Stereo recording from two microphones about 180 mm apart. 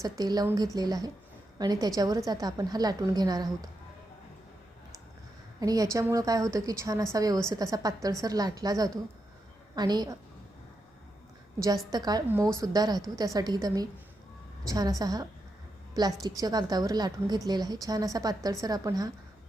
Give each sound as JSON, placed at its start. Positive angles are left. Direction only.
{"t": 0.0, "sound": "a woman's voice", "side_deg": -20}
{"t": 5.5, "sound": "a woman's voice", "side_deg": -20}
{"t": 11.9, "sound": "a woman's voice", "side_deg": -20}